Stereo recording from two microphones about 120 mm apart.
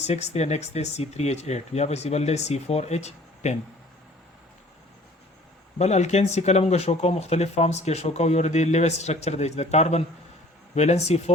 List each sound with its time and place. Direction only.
0.0 s speech: 65° left (ahead or behind)
5.8 s speech: 70° left (ahead or behind)